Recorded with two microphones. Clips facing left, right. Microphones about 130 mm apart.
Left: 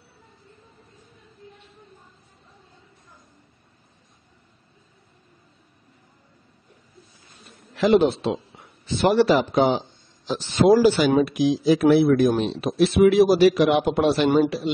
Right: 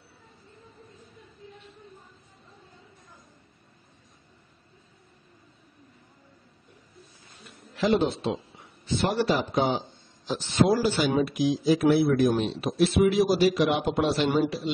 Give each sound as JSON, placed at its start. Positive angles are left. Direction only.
{"t": 7.7, "sound": "a man's voice", "side_deg": 75}
{"t": 10.2, "sound": "speech", "side_deg": 90}